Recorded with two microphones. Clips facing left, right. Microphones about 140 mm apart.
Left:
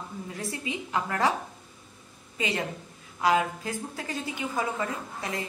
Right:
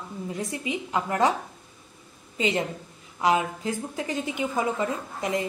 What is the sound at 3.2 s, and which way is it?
A woman's voice, 20° right (ahead or behind).